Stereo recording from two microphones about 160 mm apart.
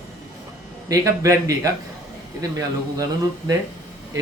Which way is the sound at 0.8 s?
20° right (ahead or behind).